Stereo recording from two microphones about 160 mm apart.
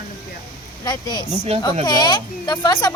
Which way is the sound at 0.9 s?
25° left (ahead or behind).